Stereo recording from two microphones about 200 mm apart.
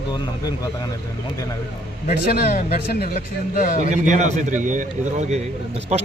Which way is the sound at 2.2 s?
50° left (ahead or behind).